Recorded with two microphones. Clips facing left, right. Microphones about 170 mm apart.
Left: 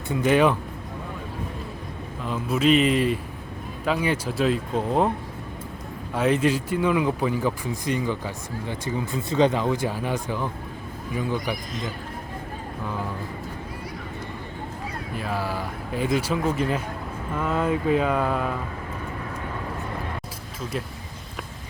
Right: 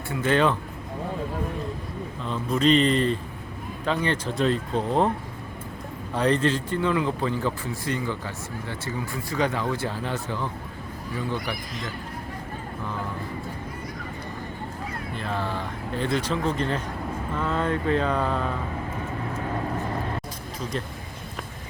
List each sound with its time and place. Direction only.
0.1 s speech: 15° left (ahead or behind)
2.2 s speech: 5° left (ahead or behind)
6.1 s speech: 5° left (ahead or behind)
15.1 s speech: 5° left (ahead or behind)